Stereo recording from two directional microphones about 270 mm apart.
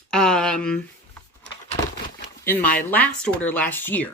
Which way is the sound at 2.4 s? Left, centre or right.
Centre.